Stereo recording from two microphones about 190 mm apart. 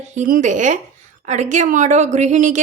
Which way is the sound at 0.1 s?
45° right (ahead or behind).